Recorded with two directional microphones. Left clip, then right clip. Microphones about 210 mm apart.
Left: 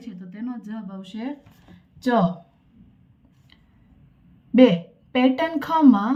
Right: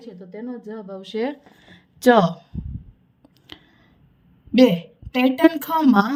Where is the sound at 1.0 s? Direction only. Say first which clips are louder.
Right 11 dB; 40° right (ahead or behind).